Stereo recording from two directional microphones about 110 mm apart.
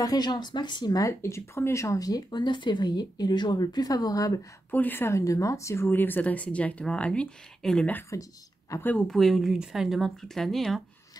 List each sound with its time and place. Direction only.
0.0 s speech: 35° left (ahead or behind)
4.6 s speech: 15° left (ahead or behind)
8.1 s speech: 30° left (ahead or behind)
9.0 s speech: centre (ahead or behind)